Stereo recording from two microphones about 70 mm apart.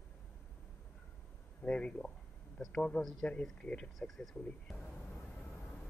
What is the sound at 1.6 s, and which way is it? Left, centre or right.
Speech, centre.